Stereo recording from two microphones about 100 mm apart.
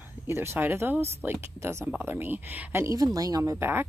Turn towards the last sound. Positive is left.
turn(degrees=-20)  # may be behind; listen again after turning